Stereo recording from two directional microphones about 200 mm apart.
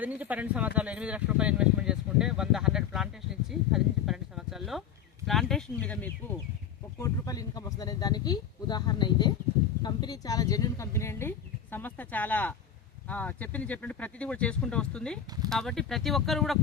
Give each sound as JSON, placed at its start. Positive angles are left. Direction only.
{"t": 0.0, "sound": "speech", "side_deg": -5}
{"t": 9.8, "sound": "a sound", "side_deg": 20}
{"t": 13.1, "sound": "speech", "side_deg": 10}